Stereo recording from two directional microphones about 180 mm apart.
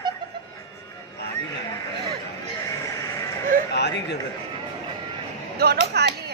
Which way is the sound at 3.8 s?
70° left (ahead or behind).